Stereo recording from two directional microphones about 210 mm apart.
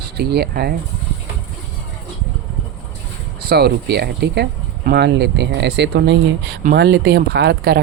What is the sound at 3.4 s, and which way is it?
Speech, 50° right (ahead or behind).